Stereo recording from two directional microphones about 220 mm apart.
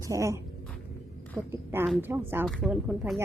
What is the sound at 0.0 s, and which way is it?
Speech, 15° right (ahead or behind).